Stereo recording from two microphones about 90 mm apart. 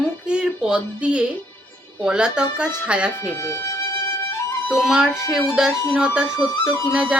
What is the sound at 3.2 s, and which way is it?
Speech, 30° left (ahead or behind).